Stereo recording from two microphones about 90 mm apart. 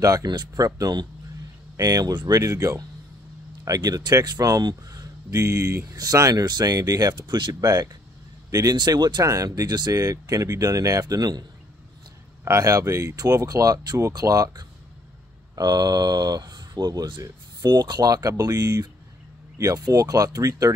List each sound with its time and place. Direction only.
0.0 s speech: 45° right (ahead or behind)
7.6 s speech: 45° right (ahead or behind)
9.2 s speech: 40° right (ahead or behind)
12.4 s speech: 40° right (ahead or behind)